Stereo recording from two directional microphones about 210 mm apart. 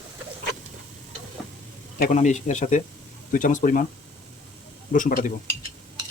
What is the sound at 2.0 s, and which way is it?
Speech, 35° left (ahead or behind).